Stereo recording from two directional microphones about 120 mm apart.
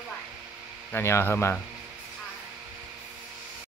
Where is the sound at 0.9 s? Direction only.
20° left (ahead or behind).